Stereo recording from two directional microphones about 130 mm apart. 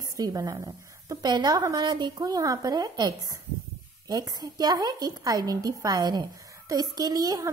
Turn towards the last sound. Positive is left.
turn(degrees=-30)  # may be behind; listen again after turning